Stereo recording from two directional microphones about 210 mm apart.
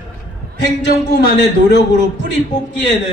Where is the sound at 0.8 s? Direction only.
55° left (ahead or behind).